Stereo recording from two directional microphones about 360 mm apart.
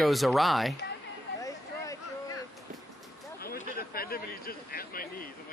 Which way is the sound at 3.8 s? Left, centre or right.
Left.